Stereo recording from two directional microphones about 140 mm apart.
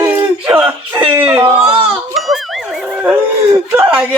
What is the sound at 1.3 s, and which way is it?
Speech, 40° right (ahead or behind).